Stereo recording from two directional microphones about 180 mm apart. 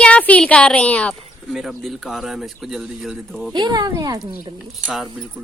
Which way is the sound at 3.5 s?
25° right (ahead or behind).